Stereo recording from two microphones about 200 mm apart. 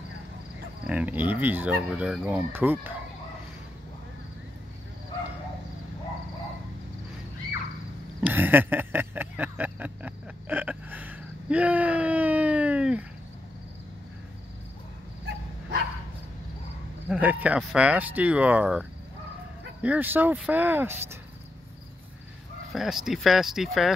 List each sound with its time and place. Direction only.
0.8 s speech: 5° right (ahead or behind)
8.2 s a sound: 10° right (ahead or behind)
17.1 s speech: 10° right (ahead or behind)
22.7 s speech: centre (ahead or behind)